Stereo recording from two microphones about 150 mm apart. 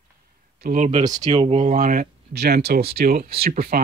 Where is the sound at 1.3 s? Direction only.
40° right (ahead or behind).